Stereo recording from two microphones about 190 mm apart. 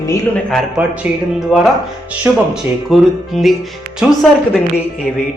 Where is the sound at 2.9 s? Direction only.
Centre (ahead or behind).